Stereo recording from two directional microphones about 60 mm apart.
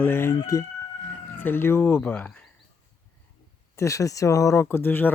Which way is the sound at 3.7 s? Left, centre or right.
Left.